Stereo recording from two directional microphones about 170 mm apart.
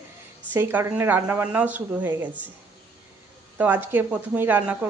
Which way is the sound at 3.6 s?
10° right (ahead or behind).